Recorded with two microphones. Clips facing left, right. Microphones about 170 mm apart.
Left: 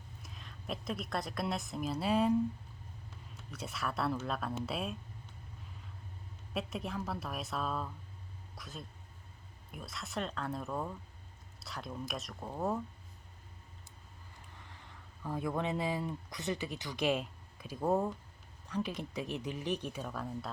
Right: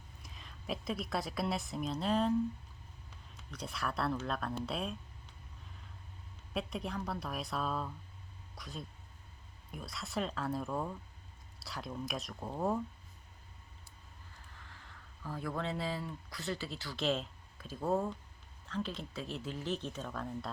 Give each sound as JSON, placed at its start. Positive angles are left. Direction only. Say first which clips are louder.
{"t": 0.2, "sound": "a woman's voice", "louder": "left 1 dB", "side_deg": 0}
{"t": 3.5, "sound": "a woman's voice", "louder": "even", "side_deg": 5}
{"t": 6.5, "sound": "a woman's voice", "louder": "even", "side_deg": 0}
{"t": 15.2, "sound": "speech", "louder": "left 3 dB", "side_deg": 20}